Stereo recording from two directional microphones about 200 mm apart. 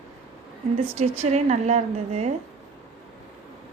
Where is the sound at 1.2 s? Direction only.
35° right (ahead or behind).